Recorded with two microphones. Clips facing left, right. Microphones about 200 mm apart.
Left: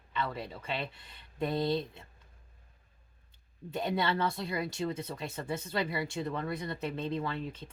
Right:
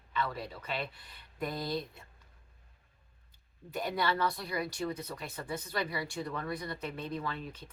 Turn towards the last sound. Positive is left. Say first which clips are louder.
# left 3 dB
turn(degrees=30)  # may be behind; listen again after turning